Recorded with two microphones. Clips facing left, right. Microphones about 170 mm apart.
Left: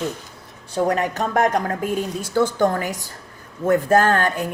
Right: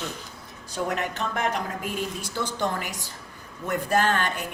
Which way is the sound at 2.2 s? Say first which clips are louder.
Left 10 dB; 50° left (ahead or behind).